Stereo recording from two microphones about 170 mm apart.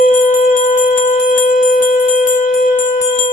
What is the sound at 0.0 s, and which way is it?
Jingle bell, 50° left (ahead or behind).